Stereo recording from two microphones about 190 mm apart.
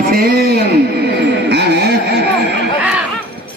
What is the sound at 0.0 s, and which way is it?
Speech, 55° right (ahead or behind).